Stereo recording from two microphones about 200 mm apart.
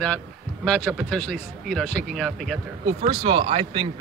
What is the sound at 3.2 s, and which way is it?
Speech, 25° right (ahead or behind).